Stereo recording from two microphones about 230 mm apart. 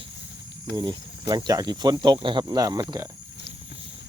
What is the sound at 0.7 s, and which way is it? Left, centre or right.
Speech, centre.